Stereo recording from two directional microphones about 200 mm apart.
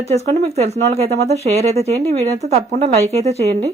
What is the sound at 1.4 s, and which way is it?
Speech, 30° right (ahead or behind).